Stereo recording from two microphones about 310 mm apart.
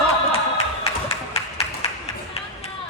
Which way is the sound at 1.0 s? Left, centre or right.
Centre.